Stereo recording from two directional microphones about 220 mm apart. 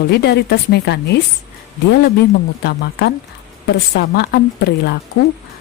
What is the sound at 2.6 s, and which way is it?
A woman's voice, 50° left (ahead or behind).